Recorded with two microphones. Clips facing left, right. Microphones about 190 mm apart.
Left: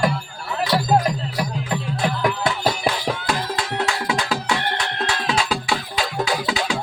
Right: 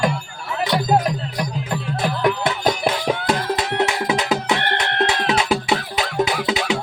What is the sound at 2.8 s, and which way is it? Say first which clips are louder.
Music: right 3 dB; 20° right (ahead or behind).